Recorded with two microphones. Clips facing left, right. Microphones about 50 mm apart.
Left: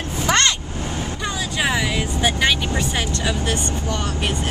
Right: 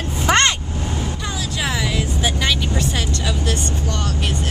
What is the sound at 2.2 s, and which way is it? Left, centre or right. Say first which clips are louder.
Vehicle: left 3 dB; centre.